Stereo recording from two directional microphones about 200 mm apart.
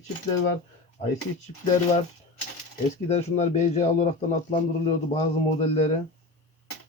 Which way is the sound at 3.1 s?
35° left (ahead or behind).